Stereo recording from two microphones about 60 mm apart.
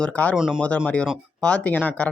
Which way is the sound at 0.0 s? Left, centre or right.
Left.